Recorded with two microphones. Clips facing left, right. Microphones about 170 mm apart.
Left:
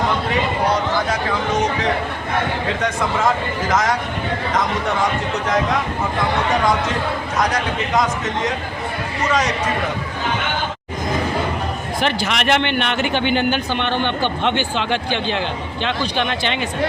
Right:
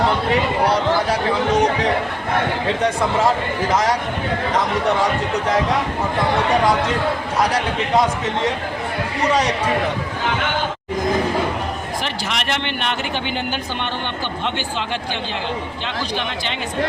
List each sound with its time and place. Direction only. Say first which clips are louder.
3.7 s speech: even; 35° right (ahead or behind)
7.3 s speech: even; 30° right (ahead or behind)
12.0 s speech: left 9 dB; 65° left (ahead or behind)